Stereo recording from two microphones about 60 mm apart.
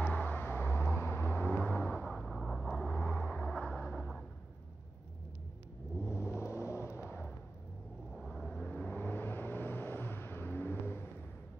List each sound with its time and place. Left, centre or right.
0.0 s vehicle: centre
1.8 s vehicle: centre
3.3 s vehicle: centre
3.5 s a sound: centre
3.8 s a sound: centre
6.0 s vehicle: left
8.1 s vehicle: centre
8.5 s vehicle: centre; by 11.1 s left